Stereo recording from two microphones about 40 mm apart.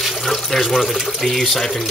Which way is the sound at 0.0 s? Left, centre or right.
Centre.